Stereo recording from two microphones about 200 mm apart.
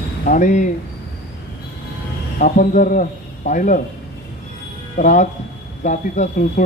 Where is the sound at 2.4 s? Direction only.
40° left (ahead or behind).